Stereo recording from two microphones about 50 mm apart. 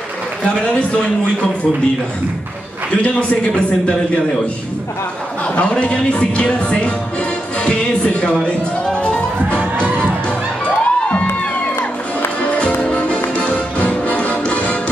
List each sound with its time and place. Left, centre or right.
0.5 s speech: left
2.9 s speech: left
5.5 s speech: left
8.8 s music: centre
10.6 s music: left
12.4 s music: left